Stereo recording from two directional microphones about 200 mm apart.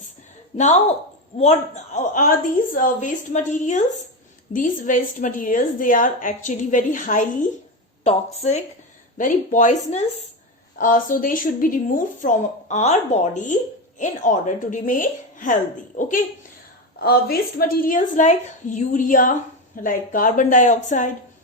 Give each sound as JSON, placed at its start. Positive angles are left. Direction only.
{"t": 0.5, "sound": "a woman's voice", "side_deg": 35}